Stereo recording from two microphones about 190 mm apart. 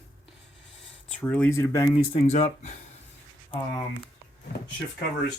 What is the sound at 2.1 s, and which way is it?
Speech, 35° left (ahead or behind).